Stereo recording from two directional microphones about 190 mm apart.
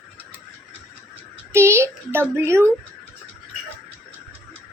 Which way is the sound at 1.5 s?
15° right (ahead or behind).